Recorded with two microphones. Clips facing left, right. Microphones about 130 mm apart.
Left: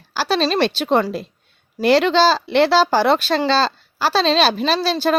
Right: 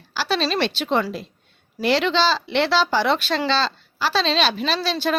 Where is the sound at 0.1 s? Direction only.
40° left (ahead or behind).